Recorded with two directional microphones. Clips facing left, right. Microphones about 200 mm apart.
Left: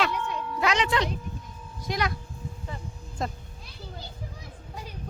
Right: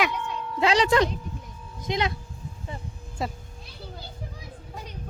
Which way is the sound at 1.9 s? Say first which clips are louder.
Right 2 dB; 25° right (ahead or behind).